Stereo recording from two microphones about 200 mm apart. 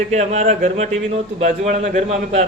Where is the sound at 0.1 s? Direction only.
35° right (ahead or behind).